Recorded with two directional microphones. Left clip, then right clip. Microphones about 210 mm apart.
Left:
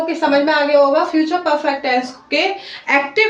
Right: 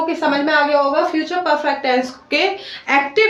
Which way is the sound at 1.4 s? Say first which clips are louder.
Even; 20° right (ahead or behind).